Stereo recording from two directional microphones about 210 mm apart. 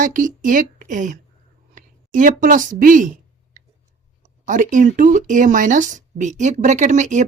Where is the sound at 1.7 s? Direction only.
40° right (ahead or behind).